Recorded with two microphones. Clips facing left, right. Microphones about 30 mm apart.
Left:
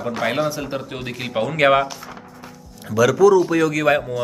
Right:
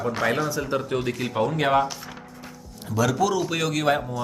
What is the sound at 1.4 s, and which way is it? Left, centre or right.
Speech, left.